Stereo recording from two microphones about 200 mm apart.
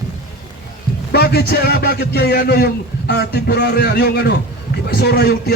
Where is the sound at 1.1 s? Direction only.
50° left (ahead or behind).